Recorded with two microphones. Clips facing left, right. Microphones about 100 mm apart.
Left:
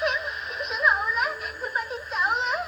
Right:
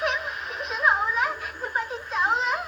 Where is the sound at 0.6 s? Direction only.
30° right (ahead or behind).